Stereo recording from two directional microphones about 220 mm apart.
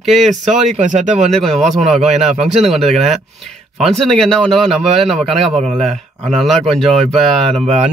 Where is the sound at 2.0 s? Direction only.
30° right (ahead or behind).